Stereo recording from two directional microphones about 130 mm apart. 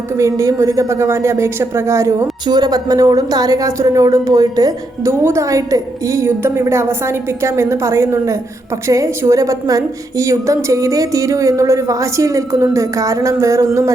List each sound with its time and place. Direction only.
0.2 s speech: 25° right (ahead or behind)